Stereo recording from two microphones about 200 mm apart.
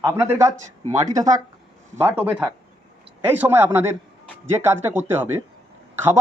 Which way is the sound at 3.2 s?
10° right (ahead or behind).